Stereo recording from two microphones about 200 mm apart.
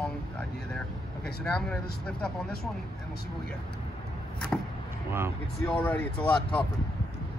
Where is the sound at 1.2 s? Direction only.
5° left (ahead or behind).